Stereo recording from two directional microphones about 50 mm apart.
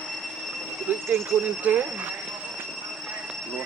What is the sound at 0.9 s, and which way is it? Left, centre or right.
Speech, right.